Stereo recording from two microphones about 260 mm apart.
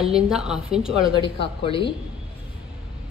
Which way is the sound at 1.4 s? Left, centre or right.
Centre.